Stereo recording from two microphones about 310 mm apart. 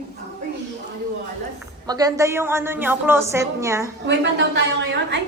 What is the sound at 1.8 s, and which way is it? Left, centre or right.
A woman's voice, centre.